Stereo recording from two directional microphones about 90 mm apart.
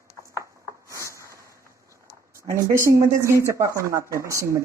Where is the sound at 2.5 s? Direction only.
40° right (ahead or behind).